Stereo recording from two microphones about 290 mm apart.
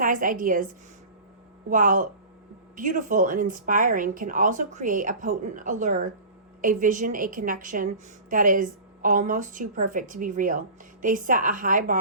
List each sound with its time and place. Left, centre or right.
0.0 s a woman's voice: right
1.7 s a woman's voice: right